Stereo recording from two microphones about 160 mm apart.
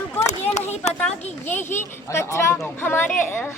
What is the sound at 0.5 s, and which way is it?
Speech, 45° left (ahead or behind).